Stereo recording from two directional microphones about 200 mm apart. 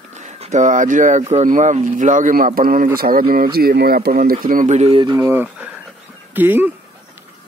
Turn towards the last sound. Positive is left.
turn(degrees=-10)  # may be behind; listen again after turning